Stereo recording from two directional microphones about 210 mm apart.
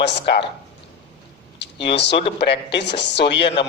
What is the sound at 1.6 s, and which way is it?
A man's voice, 55° left (ahead or behind).